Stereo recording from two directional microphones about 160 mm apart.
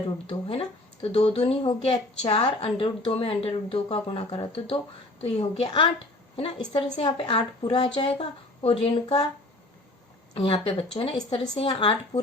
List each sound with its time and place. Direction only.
0.3 s speech: 35° left (ahead or behind)
10.3 s speech: 35° left (ahead or behind)